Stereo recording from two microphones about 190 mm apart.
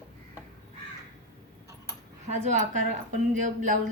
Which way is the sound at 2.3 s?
40° right (ahead or behind).